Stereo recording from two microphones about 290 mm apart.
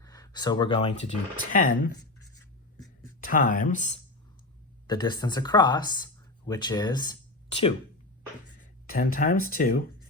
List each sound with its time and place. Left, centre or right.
0.0 s speech: centre; by 1.9 s left
2.1 s writing: left
3.2 s speech: left
8.6 s speech: left